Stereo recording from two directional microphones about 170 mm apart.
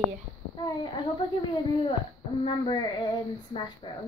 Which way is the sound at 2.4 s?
30° left (ahead or behind).